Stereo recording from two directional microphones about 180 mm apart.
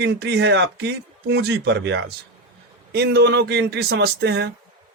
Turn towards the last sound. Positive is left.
turn(degrees=-70)  # may be behind; listen again after turning